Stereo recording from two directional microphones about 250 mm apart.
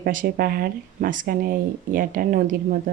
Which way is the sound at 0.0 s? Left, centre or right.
Right.